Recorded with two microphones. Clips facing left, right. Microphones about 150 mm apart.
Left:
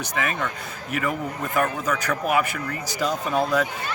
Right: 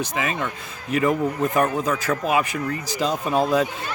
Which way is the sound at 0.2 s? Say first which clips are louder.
Left 1 dB; 20° right (ahead or behind).